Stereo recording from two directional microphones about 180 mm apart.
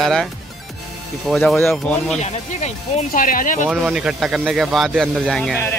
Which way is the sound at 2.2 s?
40° left (ahead or behind).